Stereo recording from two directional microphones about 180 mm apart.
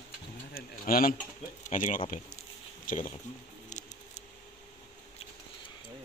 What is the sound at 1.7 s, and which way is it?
Speech, 45° left (ahead or behind).